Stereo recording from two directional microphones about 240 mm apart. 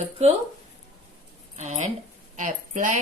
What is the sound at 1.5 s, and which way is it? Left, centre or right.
A woman's voice, right.